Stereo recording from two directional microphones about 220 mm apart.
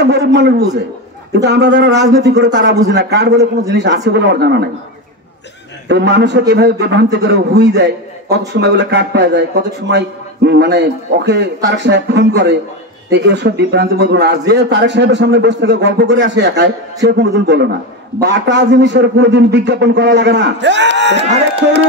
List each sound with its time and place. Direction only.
0.0 s a sound: 50° right (ahead or behind)
1.4 s a man's voice: 50° right (ahead or behind)
5.9 s a man's voice: 50° right (ahead or behind)
21.2 s speech: 30° right (ahead or behind)